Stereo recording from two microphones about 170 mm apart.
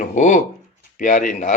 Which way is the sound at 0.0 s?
50° left (ahead or behind).